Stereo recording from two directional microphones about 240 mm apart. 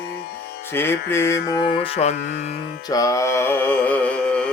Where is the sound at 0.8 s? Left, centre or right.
Centre.